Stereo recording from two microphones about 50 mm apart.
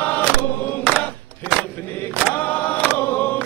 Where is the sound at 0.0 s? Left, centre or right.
Left.